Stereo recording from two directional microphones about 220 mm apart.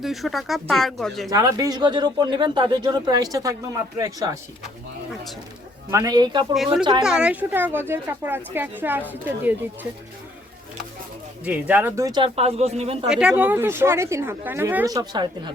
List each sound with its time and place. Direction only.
0.0 s speech: centre (ahead or behind)
1.3 s speech: 15° right (ahead or behind)
5.9 s speech: 15° right (ahead or behind)
7.0 s speech: 5° right (ahead or behind)
11.4 s speech: 5° right (ahead or behind); by 13.1 s 25° right (ahead or behind)
13.1 s speech: 5° right (ahead or behind); by 15.5 s 20° right (ahead or behind)